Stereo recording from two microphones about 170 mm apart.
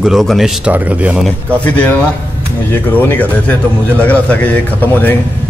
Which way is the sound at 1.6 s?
10° left (ahead or behind).